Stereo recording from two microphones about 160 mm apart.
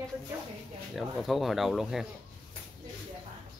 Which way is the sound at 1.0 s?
Centre (ahead or behind).